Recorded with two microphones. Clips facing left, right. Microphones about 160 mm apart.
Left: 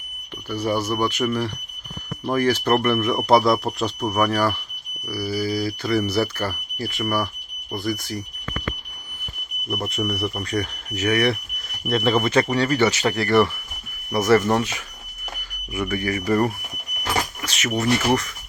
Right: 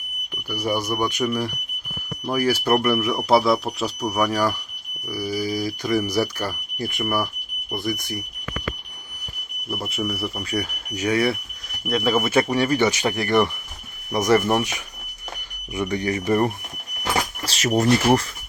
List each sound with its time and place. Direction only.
0.5 s speech: 10° right (ahead or behind)
9.6 s speech: 5° right (ahead or behind); by 16.5 s 20° right (ahead or behind)
17.4 s speech: 35° right (ahead or behind)